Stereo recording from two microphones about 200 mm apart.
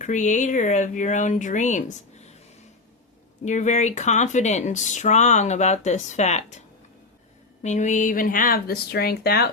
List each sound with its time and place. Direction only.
0.0 s speech: 35° left (ahead or behind)
3.4 s speech: 35° left (ahead or behind)
7.6 s speech: 35° left (ahead or behind); by 9.5 s 50° left (ahead or behind)